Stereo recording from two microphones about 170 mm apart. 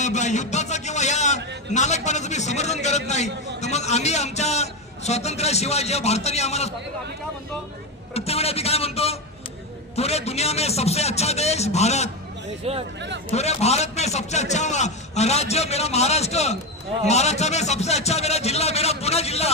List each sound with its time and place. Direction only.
0.0 s a man's voice: 45° left (ahead or behind)
8.1 s a man's voice: 35° left (ahead or behind)
13.3 s a man's voice: 40° left (ahead or behind)